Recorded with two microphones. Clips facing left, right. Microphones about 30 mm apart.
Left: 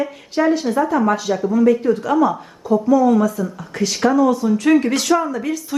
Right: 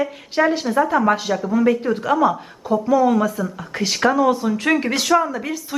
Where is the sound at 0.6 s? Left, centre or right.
Centre.